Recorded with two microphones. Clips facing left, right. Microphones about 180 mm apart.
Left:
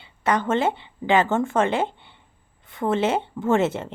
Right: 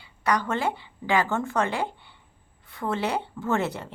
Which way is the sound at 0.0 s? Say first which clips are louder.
Left 3 dB; 25° left (ahead or behind).